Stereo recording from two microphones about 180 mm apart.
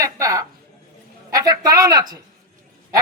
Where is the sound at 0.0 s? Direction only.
20° right (ahead or behind).